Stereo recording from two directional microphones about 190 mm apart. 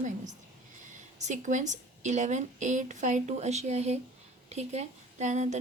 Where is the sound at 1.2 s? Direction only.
40° right (ahead or behind).